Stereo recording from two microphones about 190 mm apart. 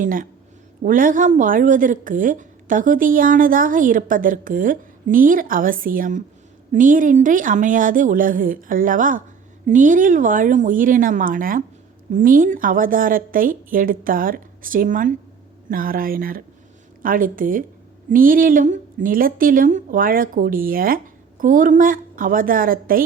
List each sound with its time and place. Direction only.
0.0 s a woman's voice: 45° right (ahead or behind)